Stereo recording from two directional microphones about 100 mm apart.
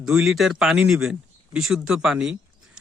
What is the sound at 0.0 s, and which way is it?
Speech, 5° right (ahead or behind).